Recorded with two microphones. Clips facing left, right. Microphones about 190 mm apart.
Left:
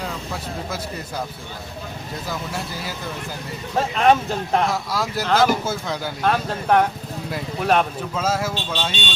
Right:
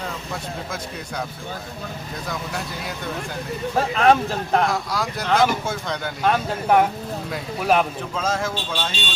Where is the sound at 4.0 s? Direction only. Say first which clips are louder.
Even; centre (ahead or behind).